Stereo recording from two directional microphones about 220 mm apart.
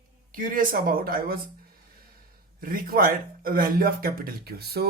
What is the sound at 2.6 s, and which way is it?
Speech, 40° right (ahead or behind).